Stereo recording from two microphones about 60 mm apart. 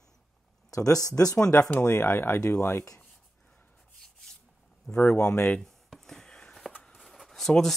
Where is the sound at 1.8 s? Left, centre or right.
Left.